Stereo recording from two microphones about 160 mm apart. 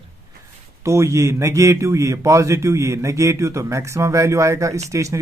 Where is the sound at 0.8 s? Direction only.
20° right (ahead or behind).